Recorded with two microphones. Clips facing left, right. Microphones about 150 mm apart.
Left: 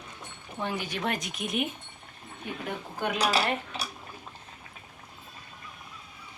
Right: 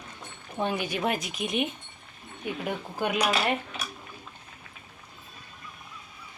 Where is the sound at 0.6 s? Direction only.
15° right (ahead or behind); by 1.6 s centre (ahead or behind).